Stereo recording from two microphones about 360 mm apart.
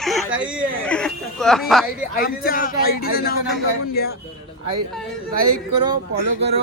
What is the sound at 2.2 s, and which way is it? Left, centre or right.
A man's voice, left.